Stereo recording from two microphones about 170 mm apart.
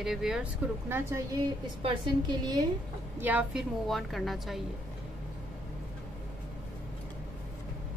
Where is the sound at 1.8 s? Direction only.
25° right (ahead or behind).